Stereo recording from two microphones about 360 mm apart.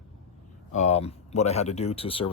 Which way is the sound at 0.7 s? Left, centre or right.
Centre.